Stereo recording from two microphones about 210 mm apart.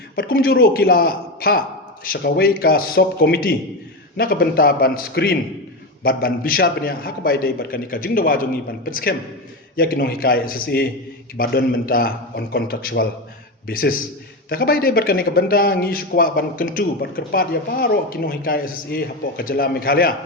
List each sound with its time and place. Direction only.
0.2 s speech: 45° left (ahead or behind)